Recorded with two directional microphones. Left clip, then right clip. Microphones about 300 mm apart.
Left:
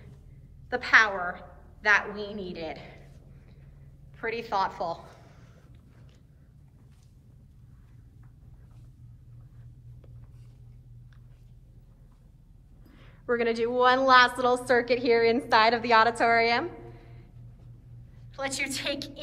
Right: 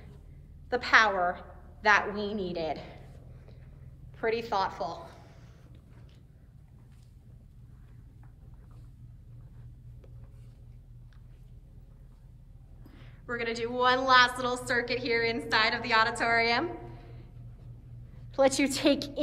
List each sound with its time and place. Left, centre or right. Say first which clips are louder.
0.7 s a woman's voice: left 2 dB; centre
4.1 s a sound: right 1 dB; centre
12.9 s a woman's voice: left 8 dB; centre
18.3 s a woman's voice: right 6 dB; centre